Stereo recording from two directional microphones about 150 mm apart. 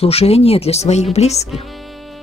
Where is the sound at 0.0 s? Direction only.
40° left (ahead or behind).